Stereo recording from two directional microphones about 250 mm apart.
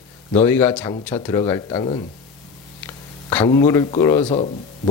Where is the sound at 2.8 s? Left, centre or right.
Centre.